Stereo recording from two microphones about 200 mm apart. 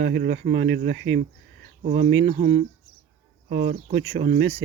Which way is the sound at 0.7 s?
60° right (ahead or behind).